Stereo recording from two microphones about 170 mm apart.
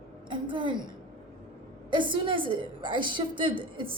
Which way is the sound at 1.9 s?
30° right (ahead or behind).